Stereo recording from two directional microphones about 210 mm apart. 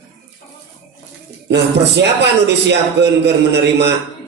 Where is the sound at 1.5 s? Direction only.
55° right (ahead or behind).